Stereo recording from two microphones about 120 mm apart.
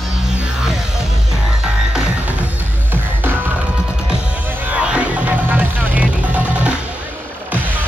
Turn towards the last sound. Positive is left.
turn(degrees=-10)  # may be behind; listen again after turning